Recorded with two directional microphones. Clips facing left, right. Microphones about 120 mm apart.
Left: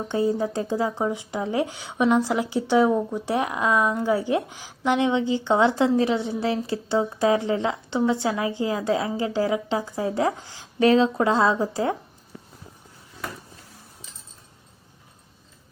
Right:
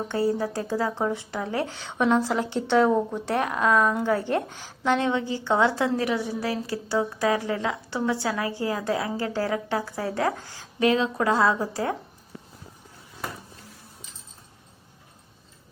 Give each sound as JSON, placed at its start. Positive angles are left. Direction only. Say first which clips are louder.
{"t": 0.1, "sound": "a woman's voice", "louder": "left 3 dB", "side_deg": 20}
{"t": 10.8, "sound": "a woman's voice", "louder": "left 4 dB", "side_deg": 30}